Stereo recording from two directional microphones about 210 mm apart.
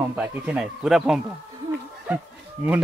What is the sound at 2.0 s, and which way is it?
Music, 10° right (ahead or behind).